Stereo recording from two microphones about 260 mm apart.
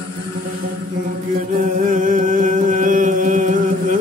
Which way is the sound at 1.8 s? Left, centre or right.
Right.